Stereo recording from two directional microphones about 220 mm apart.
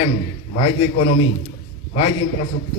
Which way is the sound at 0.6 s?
35° left (ahead or behind).